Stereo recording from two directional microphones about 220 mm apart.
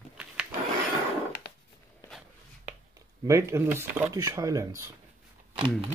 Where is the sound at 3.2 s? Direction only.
10° right (ahead or behind).